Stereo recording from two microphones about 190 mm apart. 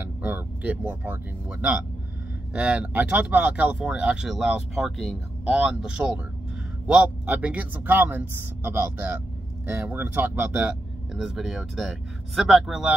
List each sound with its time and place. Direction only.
0.0 s a man's voice: 10° right (ahead or behind)